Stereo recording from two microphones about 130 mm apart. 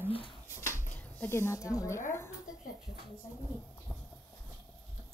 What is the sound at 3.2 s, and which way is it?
Speech, 30° left (ahead or behind).